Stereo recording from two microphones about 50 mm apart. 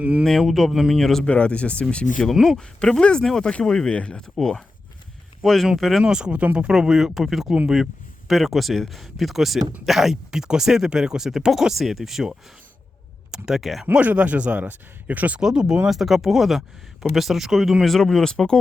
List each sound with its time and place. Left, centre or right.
0.0 s speech: right
0.3 s speech: centre
1.2 s speech: left
2.4 s speech: centre
4.4 s speech: centre
6.0 s speech: centre
6.3 s speech: right
6.7 s speech: centre
13.9 s speech: right
15.4 s speech: centre
17.9 s speech: centre